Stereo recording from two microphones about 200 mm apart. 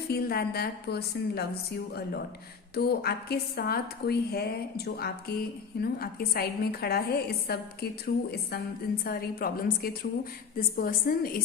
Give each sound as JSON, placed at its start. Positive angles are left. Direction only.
{"t": 0.1, "sound": "a woman's voice", "side_deg": 50}
{"t": 2.7, "sound": "a woman's voice", "side_deg": 50}